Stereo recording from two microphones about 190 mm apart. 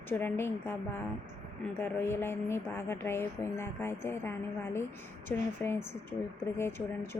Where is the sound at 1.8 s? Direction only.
10° left (ahead or behind).